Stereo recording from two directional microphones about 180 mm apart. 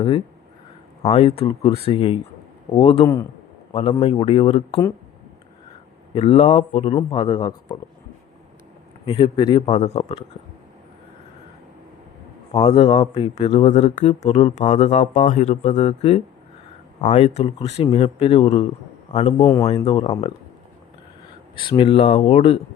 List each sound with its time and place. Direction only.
1.1 s speech: 35° left (ahead or behind)
6.1 s speech: 35° left (ahead or behind)
9.0 s speech: 25° left (ahead or behind)
12.5 s a man's voice: 25° left (ahead or behind)
21.5 s speech: 25° left (ahead or behind)